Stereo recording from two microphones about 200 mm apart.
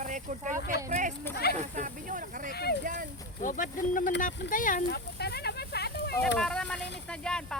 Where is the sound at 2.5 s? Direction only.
55° left (ahead or behind).